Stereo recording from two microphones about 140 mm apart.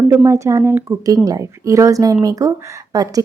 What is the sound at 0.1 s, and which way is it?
A woman's voice, 25° right (ahead or behind).